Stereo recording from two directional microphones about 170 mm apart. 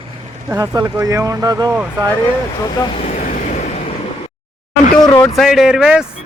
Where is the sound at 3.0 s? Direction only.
45° left (ahead or behind).